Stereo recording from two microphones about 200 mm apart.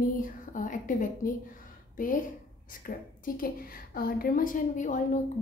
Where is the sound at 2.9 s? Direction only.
45° left (ahead or behind).